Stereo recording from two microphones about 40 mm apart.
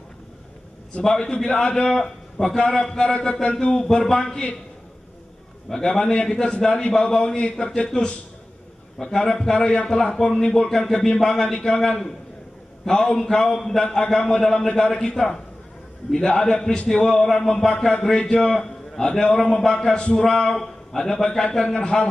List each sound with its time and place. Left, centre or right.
1.0 s a man's voice: centre
3.7 s a man's voice: centre
5.7 s a man's voice: centre